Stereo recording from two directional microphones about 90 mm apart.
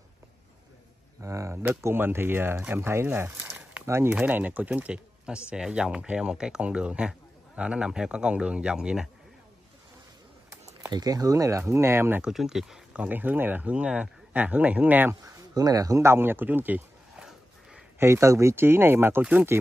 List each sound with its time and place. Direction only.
1.2 s speech: 35° right (ahead or behind)
3.1 s a sound: 25° right (ahead or behind)
3.8 s speech: 30° right (ahead or behind)
4.1 s speech: 20° right (ahead or behind)
10.9 s speech: 45° right (ahead or behind); by 12.2 s 25° right (ahead or behind)
12.2 s speech: 5° right (ahead or behind)
15.2 s speech: 45° right (ahead or behind); by 16.8 s 20° right (ahead or behind)
17.2 s battle cry: 10° right (ahead or behind)
17.9 s speech: 30° right (ahead or behind)